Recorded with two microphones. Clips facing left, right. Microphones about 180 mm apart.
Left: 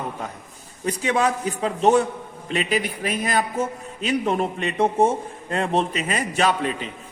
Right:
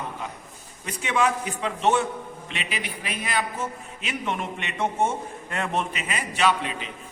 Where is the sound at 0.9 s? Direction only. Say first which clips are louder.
Left 3 dB; 40° left (ahead or behind).